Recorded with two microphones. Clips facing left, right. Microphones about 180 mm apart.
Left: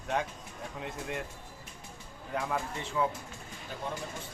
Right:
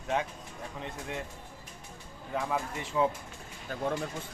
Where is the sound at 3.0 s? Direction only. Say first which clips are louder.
Right 3 dB; 25° right (ahead or behind).